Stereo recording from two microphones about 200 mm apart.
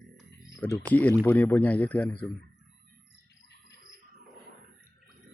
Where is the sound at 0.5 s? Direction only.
15° left (ahead or behind).